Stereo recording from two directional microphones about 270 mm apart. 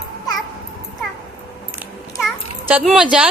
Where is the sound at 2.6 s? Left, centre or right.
Centre.